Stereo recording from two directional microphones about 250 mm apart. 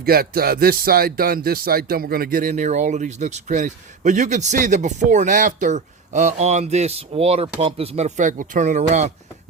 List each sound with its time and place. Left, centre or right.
0.0 s speech: right